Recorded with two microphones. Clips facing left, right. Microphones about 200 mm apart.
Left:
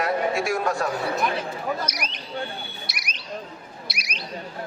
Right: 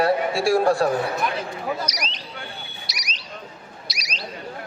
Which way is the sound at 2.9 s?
55° left (ahead or behind).